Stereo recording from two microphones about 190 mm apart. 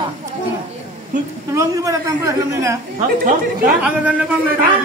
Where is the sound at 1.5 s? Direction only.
15° right (ahead or behind).